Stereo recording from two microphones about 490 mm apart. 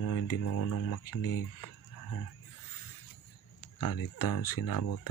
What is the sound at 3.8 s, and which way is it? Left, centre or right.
Speech, left.